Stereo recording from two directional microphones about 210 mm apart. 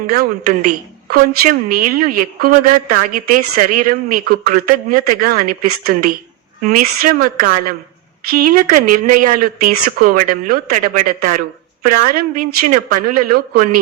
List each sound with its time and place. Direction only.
0.1 s a woman's voice: 45° right (ahead or behind)